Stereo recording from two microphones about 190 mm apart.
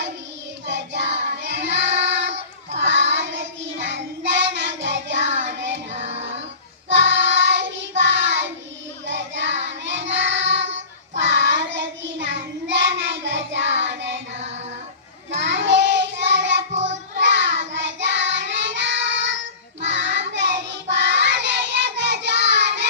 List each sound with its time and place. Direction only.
0.7 s child singing: 65° right (ahead or behind)
6.1 s child singing: 35° right (ahead or behind)
6.8 s child singing: 70° right (ahead or behind)